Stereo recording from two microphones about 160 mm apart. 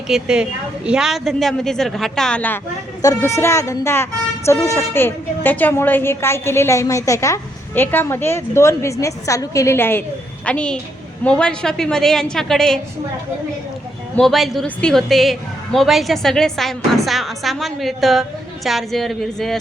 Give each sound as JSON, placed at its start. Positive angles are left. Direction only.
{"t": 0.1, "sound": "a woman's voice", "side_deg": -5}
{"t": 3.0, "sound": "a woman's voice", "side_deg": 20}
{"t": 14.2, "sound": "a woman's voice", "side_deg": 0}